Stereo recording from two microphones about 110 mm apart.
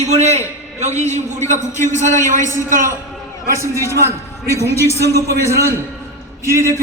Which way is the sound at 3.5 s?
25° right (ahead or behind).